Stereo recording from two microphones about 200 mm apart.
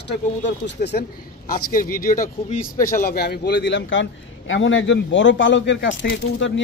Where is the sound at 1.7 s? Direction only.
45° left (ahead or behind).